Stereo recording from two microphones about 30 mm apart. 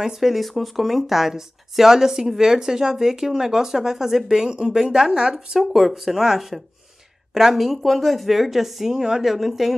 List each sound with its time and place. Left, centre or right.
0.2 s speech: centre
4.5 s a woman's voice: right
5.6 s speech: centre
8.9 s a woman's voice: centre
9.2 s speech: centre